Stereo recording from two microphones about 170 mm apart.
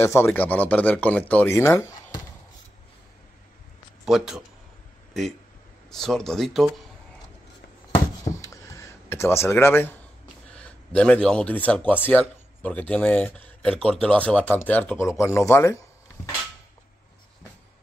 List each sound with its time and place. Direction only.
0.0 s speech: 15° left (ahead or behind)
4.0 s speech: 5° right (ahead or behind)
8.2 s a sound: 20° left (ahead or behind)
10.5 s speech: 5° left (ahead or behind)